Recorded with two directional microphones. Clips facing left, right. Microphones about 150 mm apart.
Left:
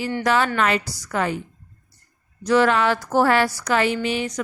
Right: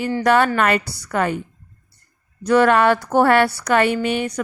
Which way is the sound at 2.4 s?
55° right (ahead or behind).